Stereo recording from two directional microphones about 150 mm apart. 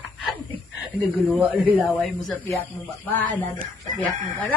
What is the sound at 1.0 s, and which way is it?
Speech, 5° right (ahead or behind).